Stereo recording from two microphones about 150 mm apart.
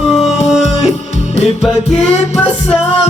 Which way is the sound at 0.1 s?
45° left (ahead or behind).